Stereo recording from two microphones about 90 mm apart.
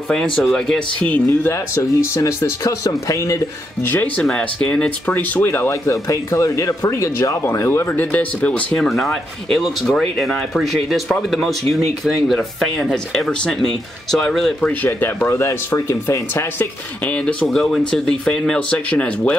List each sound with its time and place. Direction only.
0.1 s speech: 5° left (ahead or behind)
1.5 s speech: 35° left (ahead or behind)
3.8 s speech: 20° left (ahead or behind)
4.2 s speech: 5° left (ahead or behind)
8.8 s speech: centre (ahead or behind)
14.6 s speech: 20° left (ahead or behind); by 16.2 s 35° left (ahead or behind)
16.3 s speech: 20° left (ahead or behind)